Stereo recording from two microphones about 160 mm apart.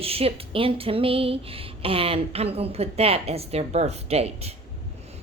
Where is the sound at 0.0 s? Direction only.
40° right (ahead or behind).